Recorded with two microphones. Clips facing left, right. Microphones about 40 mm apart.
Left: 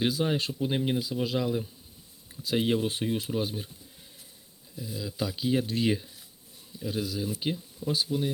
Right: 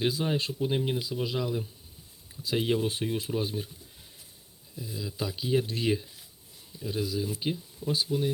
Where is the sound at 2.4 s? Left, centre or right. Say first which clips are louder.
Left 1 dB; left.